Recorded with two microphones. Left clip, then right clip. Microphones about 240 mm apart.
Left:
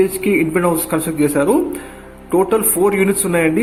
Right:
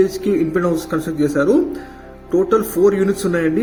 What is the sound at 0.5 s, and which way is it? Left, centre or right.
Speech, centre.